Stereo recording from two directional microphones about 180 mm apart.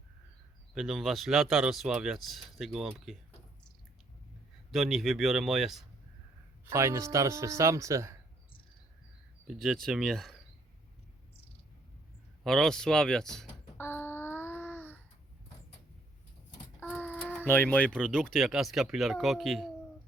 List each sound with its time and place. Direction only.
0.7 s speech: centre (ahead or behind)
4.7 s speech: centre (ahead or behind)
6.7 s speech: 15° right (ahead or behind)
9.5 s speech: centre (ahead or behind)
12.4 s speech: centre (ahead or behind)
13.7 s a sound: 10° left (ahead or behind)
16.8 s a sound: 5° left (ahead or behind)
17.4 s speech: 10° left (ahead or behind)